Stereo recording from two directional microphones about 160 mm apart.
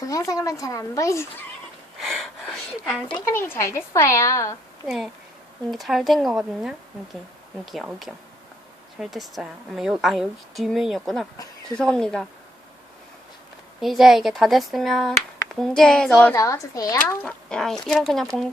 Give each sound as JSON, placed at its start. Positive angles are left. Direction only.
{"t": 0.0, "sound": "a woman's voice", "side_deg": 20}
{"t": 2.0, "sound": "a sound", "side_deg": 5}
{"t": 3.3, "sound": "a woman's voice", "side_deg": 15}
{"t": 5.7, "sound": "a woman's voice", "side_deg": 0}
{"t": 13.8, "sound": "a woman's voice", "side_deg": 0}
{"t": 16.3, "sound": "a woman's voice", "side_deg": 20}